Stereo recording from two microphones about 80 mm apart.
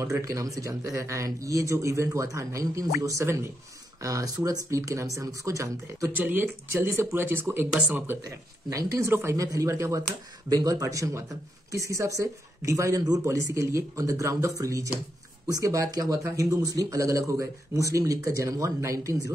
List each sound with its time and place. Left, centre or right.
0.0 s a man's voice: right
6.1 s speech: right
6.7 s a man's voice: right
8.2 s a man's voice: right